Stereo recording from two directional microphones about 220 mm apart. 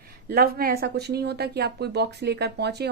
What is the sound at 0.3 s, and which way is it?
Speech, 45° right (ahead or behind).